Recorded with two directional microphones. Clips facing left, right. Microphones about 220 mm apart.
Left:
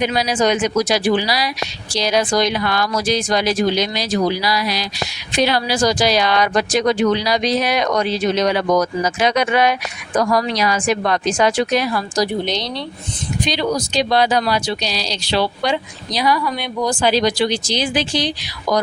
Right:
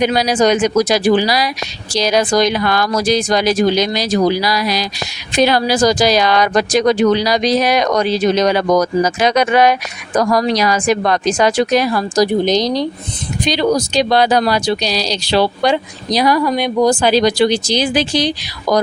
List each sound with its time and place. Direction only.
0.0 s speech: 40° right (ahead or behind)